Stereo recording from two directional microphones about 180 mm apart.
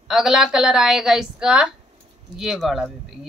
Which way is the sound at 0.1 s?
Centre (ahead or behind).